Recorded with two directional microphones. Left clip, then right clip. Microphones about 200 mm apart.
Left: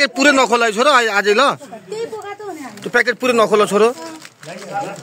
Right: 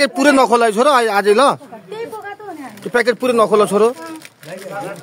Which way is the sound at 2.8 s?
5° right (ahead or behind).